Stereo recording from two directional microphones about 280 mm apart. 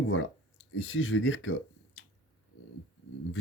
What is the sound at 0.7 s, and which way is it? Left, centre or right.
Speech, left.